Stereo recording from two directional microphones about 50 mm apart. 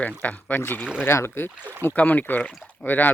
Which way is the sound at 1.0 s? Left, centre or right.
Left.